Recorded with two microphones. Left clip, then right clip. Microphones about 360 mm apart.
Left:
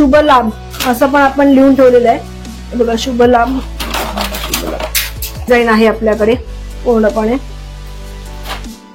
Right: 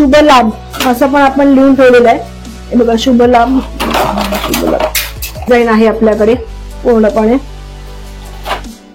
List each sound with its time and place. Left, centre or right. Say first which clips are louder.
0.0 s speech: right 2 dB; left
8.5 s music: right 7 dB; left